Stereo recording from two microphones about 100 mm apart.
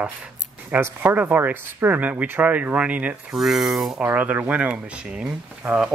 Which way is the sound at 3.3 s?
Centre (ahead or behind).